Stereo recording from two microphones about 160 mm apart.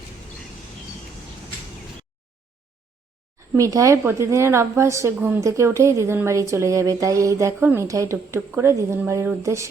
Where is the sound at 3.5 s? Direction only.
20° right (ahead or behind).